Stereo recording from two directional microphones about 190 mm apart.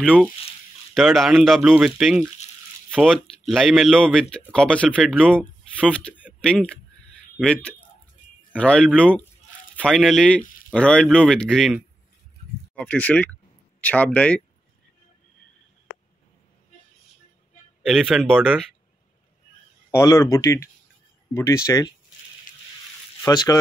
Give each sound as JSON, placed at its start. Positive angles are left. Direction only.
{"t": 0.9, "sound": "speech", "side_deg": 0}
{"t": 17.8, "sound": "speech", "side_deg": -5}
{"t": 19.9, "sound": "speech", "side_deg": 15}
{"t": 23.2, "sound": "speech", "side_deg": 20}